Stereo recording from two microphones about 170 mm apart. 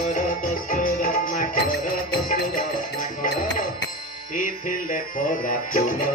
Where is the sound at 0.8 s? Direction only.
50° left (ahead or behind).